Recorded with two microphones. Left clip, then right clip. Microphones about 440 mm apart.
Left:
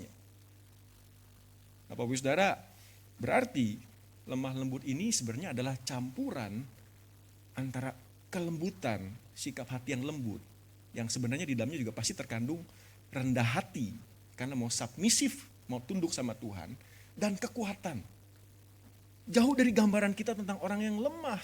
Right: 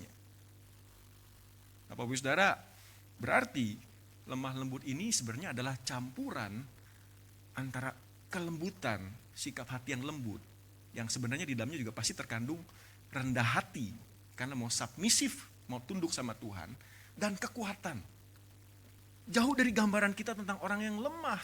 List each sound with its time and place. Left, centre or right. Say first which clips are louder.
1.9 s a man's voice: left 2 dB; right
19.3 s a man's voice: left 3 dB; right